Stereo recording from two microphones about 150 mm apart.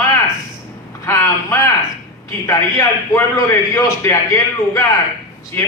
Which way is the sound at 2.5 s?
20° left (ahead or behind).